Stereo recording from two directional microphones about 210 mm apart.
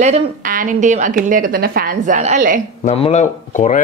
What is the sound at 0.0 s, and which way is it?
Speech, 35° right (ahead or behind).